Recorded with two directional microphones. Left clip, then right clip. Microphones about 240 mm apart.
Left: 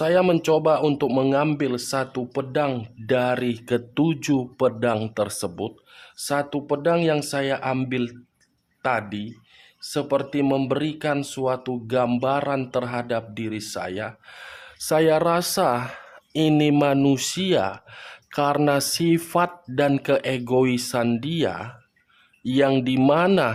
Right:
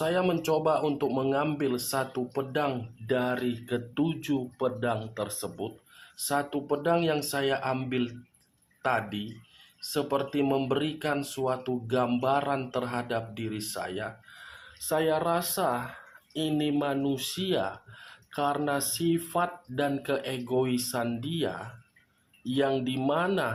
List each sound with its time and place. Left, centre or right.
0.0 s speech: left